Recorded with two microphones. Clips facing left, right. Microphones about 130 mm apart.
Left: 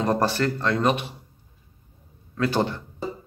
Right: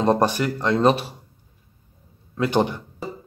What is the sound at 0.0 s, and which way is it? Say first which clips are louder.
Speech: right 3 dB; 20° right (ahead or behind).